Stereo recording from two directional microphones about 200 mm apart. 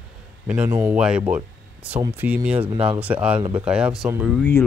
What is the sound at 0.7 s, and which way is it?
Speech, 15° right (ahead or behind).